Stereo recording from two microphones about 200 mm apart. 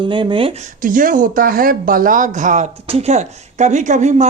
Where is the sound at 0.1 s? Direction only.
25° right (ahead or behind).